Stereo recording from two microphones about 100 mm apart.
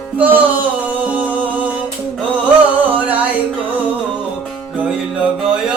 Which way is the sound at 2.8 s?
15° right (ahead or behind).